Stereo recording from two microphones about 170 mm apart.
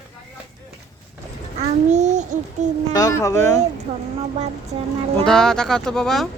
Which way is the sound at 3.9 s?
30° right (ahead or behind).